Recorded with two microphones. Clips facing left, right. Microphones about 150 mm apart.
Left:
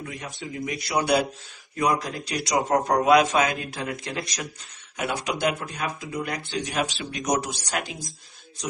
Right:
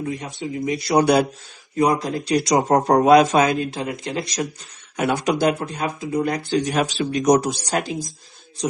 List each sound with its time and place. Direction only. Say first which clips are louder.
0.0 s speech: right 8 dB; 25° right (ahead or behind); by 1.2 s 40° right (ahead or behind)
1.7 s speech: right 5 dB; 25° right (ahead or behind)
3.7 s speech: right 5 dB; 25° right (ahead or behind)
4.9 s speech: right 8 dB; 45° right (ahead or behind)